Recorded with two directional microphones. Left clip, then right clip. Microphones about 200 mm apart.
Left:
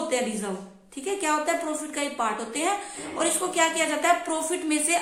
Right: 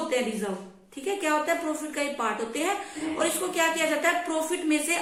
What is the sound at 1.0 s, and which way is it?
Speech, 50° left (ahead or behind).